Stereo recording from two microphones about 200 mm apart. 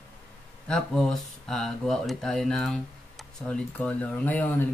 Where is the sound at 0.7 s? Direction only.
5° left (ahead or behind).